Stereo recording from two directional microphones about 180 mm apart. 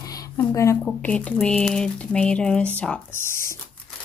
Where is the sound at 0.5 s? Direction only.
15° left (ahead or behind).